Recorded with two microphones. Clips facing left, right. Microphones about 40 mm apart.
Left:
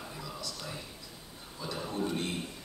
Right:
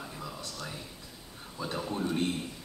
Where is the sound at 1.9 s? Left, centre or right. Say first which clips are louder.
Even; centre.